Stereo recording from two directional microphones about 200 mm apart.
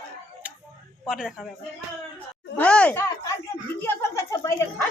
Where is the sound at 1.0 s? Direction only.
5° right (ahead or behind).